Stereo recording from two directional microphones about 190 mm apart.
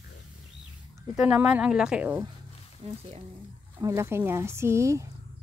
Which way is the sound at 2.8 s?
30° right (ahead or behind).